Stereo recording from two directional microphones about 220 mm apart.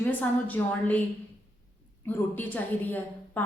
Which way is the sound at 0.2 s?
5° left (ahead or behind).